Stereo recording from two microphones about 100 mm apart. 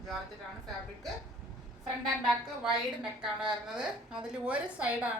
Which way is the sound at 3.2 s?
5° right (ahead or behind).